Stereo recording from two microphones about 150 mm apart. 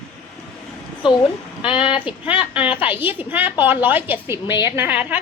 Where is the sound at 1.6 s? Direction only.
35° left (ahead or behind).